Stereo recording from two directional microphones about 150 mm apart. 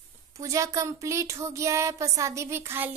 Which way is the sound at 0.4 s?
20° right (ahead or behind).